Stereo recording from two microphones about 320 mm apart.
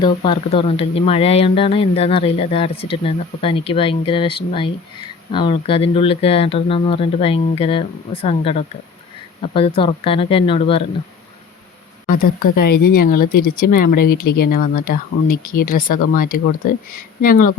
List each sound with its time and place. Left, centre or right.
0.0 s speech: centre
12.0 s speech: left
14.0 s speech: left
14.3 s speech: left